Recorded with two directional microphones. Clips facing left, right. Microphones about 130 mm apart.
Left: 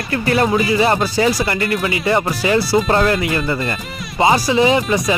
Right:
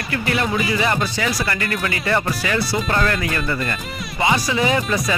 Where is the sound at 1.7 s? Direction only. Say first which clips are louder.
Left 4 dB; 15° left (ahead or behind).